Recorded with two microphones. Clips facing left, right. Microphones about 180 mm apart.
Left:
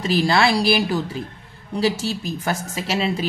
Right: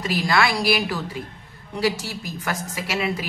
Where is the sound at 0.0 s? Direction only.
30° left (ahead or behind).